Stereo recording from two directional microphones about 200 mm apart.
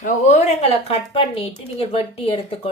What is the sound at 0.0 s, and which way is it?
Speech, 35° left (ahead or behind).